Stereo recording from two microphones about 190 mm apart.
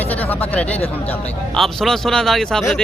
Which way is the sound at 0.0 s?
10° left (ahead or behind).